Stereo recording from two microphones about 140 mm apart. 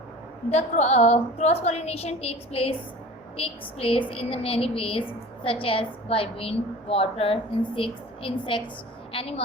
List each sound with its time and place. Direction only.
0.5 s a woman's voice: 50° left (ahead or behind)